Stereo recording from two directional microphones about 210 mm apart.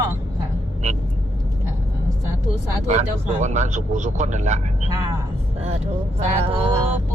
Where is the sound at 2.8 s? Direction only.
35° right (ahead or behind).